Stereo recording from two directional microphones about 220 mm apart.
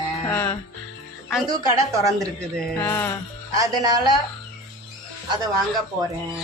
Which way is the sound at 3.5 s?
15° right (ahead or behind).